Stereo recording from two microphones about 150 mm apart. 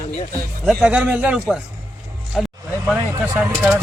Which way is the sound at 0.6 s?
5° right (ahead or behind).